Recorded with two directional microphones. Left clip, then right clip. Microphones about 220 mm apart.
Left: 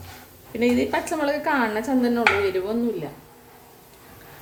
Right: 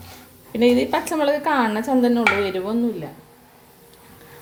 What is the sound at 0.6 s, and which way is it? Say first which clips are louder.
A woman's voice: right 4 dB; 30° right (ahead or behind).